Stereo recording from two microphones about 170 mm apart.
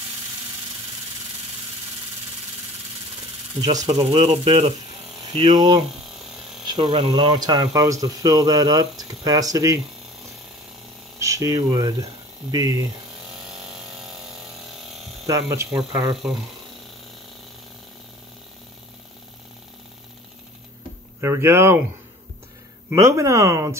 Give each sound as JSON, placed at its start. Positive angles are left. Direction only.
{"t": 3.9, "sound": "speech", "side_deg": -35}
{"t": 11.1, "sound": "speech", "side_deg": -20}
{"t": 13.7, "sound": "power tool", "side_deg": -5}
{"t": 15.2, "sound": "speech", "side_deg": -15}
{"t": 15.8, "sound": "speech", "side_deg": -5}
{"t": 21.2, "sound": "speech", "side_deg": -15}
{"t": 22.8, "sound": "speech", "side_deg": -15}